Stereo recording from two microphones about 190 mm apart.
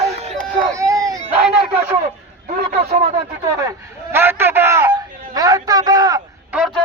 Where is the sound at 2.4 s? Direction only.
35° right (ahead or behind).